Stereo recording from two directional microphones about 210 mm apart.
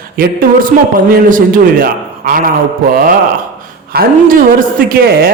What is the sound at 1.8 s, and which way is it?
Speech, 40° right (ahead or behind).